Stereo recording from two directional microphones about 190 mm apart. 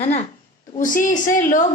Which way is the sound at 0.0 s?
35° left (ahead or behind).